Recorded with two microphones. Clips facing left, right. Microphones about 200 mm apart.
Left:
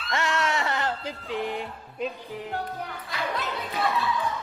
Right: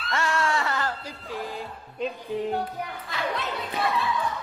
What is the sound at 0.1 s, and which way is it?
Music, 20° left (ahead or behind).